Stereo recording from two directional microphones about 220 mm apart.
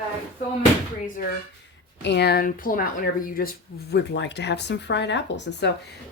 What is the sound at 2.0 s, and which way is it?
Speech, 50° left (ahead or behind).